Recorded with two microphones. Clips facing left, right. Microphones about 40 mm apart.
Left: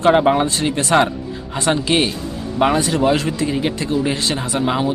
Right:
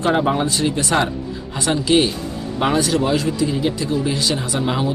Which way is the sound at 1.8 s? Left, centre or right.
Left.